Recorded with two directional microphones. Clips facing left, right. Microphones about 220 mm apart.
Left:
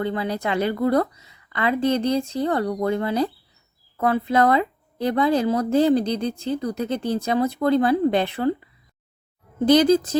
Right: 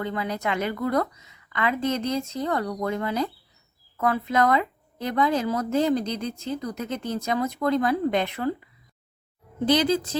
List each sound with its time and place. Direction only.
0.0 s speech: 30° left (ahead or behind)
9.6 s speech: 45° left (ahead or behind)